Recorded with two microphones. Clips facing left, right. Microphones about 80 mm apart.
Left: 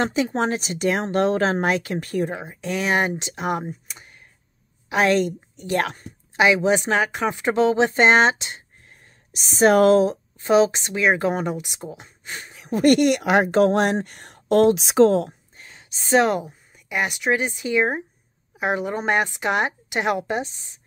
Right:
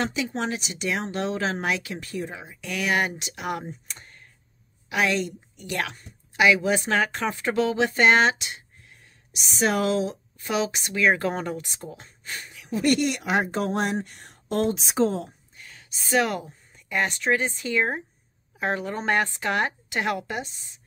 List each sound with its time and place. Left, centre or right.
0.0 s speech: left
2.6 s speech: left
3.6 s speech: centre
4.8 s a woman's voice: left
6.3 s speech: left
10.4 s speech: left
12.6 s speech: left
15.5 s a sound: left
16.7 s speech: centre